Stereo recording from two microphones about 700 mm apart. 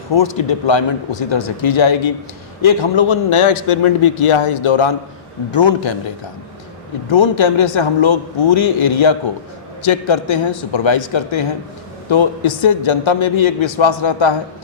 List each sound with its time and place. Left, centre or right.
0.1 s a man's voice: left
7.1 s a man's voice: left